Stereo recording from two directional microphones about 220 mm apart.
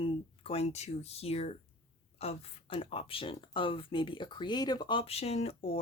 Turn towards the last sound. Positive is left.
turn(degrees=25)  # may be behind; listen again after turning